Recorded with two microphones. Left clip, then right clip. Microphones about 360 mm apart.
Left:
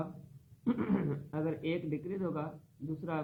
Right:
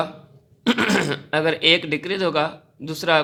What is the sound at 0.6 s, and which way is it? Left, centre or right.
A man's voice, right.